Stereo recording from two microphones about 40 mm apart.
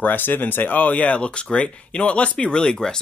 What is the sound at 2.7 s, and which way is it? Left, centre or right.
Speech, centre.